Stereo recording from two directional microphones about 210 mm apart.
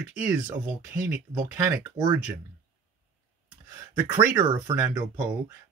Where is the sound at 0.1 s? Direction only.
5° right (ahead or behind).